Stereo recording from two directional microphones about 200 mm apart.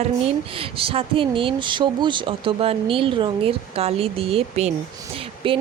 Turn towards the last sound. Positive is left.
turn(degrees=-25)  # may be behind; listen again after turning